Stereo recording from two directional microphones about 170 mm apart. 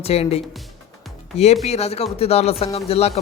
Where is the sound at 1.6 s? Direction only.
40° left (ahead or behind).